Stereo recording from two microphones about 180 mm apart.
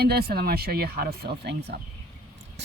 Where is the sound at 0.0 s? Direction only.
60° right (ahead or behind).